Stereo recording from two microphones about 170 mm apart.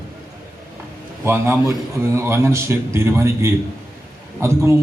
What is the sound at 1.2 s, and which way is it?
A man's voice, 15° right (ahead or behind).